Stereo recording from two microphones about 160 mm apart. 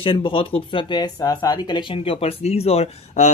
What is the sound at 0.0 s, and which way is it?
Speech, 35° left (ahead or behind).